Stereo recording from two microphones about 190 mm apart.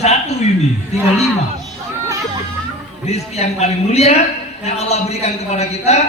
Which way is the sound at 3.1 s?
35° left (ahead or behind).